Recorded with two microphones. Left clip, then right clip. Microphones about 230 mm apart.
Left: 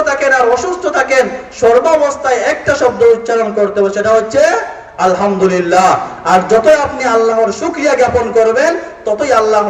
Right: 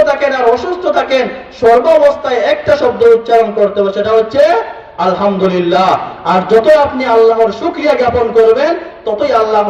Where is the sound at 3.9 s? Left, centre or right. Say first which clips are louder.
Even; right.